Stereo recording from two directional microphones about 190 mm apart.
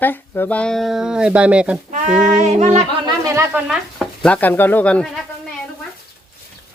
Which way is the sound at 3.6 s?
5° left (ahead or behind).